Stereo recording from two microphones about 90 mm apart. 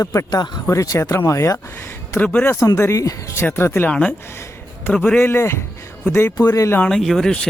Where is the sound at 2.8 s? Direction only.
35° left (ahead or behind).